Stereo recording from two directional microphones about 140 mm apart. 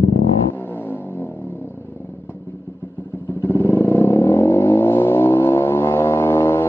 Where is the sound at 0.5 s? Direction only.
15° left (ahead or behind).